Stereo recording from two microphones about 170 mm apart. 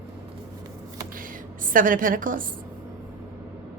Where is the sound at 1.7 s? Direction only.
55° right (ahead or behind).